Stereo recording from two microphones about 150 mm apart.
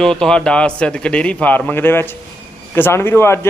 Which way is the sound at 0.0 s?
5° left (ahead or behind).